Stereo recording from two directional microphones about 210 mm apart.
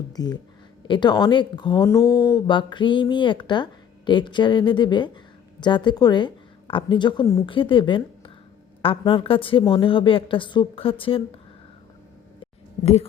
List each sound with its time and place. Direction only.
0.9 s a woman's voice: 20° left (ahead or behind)
12.8 s speech: 30° left (ahead or behind)